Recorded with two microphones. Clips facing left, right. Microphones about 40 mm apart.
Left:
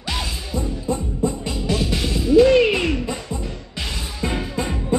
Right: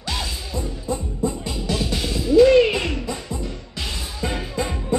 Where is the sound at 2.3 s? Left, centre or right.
Centre.